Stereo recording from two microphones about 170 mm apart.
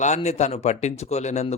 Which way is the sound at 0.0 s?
45° left (ahead or behind).